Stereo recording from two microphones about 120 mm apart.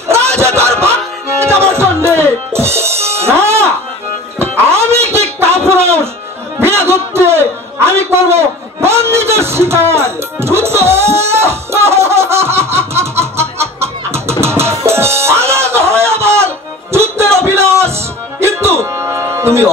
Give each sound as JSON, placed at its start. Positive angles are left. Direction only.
{"t": 0.4, "sound": "snicker", "side_deg": -20}
{"t": 1.4, "sound": "music", "side_deg": -20}
{"t": 5.7, "sound": "a sound", "side_deg": -20}
{"t": 14.4, "sound": "music", "side_deg": -20}